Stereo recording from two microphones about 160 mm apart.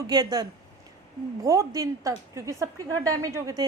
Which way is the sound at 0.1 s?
25° right (ahead or behind).